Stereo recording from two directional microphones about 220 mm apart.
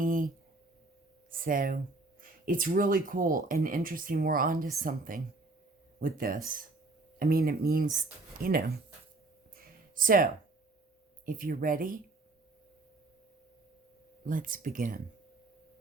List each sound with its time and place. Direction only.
0.0 s a sound: 40° right (ahead or behind)
1.3 s speech: 40° right (ahead or behind)
9.9 s speech: 40° right (ahead or behind)
11.3 s speech: 40° right (ahead or behind)
14.3 s speech: 40° right (ahead or behind)